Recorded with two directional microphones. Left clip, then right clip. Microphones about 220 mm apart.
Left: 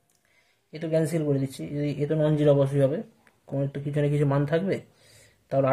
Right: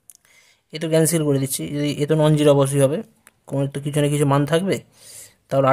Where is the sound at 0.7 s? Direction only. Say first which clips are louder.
Right 7 dB; 40° right (ahead or behind).